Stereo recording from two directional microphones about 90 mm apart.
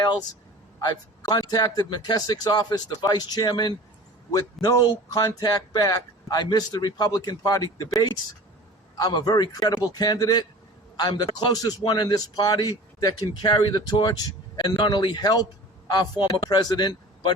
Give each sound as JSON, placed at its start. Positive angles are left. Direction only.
{"t": 0.8, "sound": "speech", "side_deg": 50}
{"t": 9.0, "sound": "speech", "side_deg": 45}